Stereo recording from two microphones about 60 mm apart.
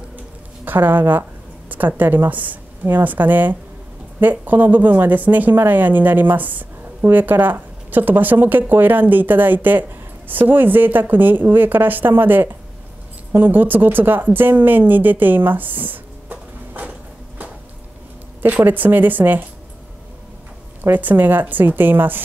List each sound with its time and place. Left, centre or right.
0.7 s a woman's voice: right
18.4 s a woman's voice: right
20.8 s a woman's voice: right